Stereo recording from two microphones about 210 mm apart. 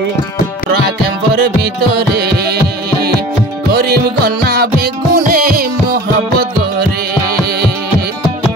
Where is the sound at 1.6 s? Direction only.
50° right (ahead or behind).